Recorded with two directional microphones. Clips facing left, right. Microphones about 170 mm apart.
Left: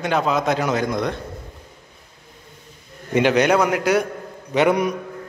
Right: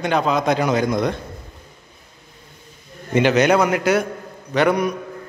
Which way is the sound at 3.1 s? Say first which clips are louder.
Right 1 dB; centre (ahead or behind).